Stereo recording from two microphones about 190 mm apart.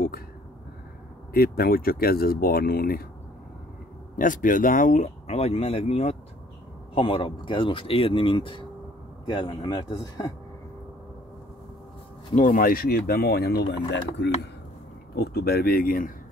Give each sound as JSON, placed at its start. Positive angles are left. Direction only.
{"t": 1.3, "sound": "speech", "side_deg": 55}
{"t": 4.2, "sound": "speech", "side_deg": 45}
{"t": 12.4, "sound": "speech", "side_deg": 50}